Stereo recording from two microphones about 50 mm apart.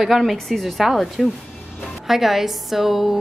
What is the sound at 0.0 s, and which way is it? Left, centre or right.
A woman's voice, centre.